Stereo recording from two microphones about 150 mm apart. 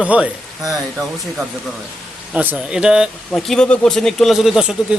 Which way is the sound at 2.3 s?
5° right (ahead or behind).